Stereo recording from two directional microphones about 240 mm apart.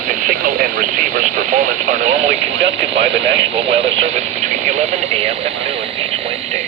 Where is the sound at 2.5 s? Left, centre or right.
Right.